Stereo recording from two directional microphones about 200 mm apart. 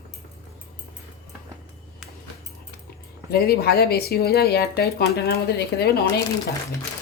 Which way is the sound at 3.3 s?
50° left (ahead or behind).